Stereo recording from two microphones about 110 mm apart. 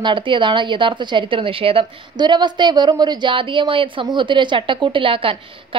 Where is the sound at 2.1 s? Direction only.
45° right (ahead or behind).